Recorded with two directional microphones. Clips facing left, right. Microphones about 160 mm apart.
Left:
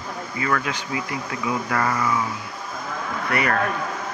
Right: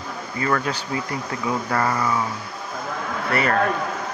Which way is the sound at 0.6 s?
35° right (ahead or behind).